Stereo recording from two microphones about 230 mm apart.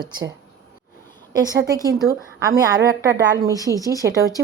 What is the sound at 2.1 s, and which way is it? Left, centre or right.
A woman's voice, centre.